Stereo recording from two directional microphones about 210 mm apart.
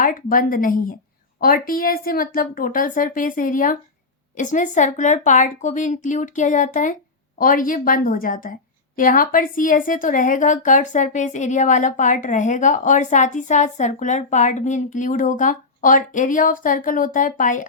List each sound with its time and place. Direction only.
0.0 s a woman's voice: 40° left (ahead or behind)